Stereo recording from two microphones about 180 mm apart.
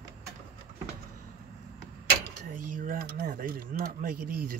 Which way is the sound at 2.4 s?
50° right (ahead or behind).